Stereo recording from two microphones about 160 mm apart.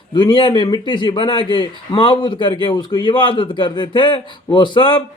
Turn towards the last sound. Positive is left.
turn(degrees=30)  # may be behind; listen again after turning